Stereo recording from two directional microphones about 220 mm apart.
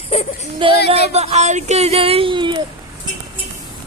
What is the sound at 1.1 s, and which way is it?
Speech, 30° right (ahead or behind).